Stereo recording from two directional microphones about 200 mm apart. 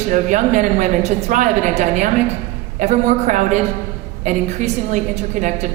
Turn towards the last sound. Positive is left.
turn(degrees=-35)  # may be behind; listen again after turning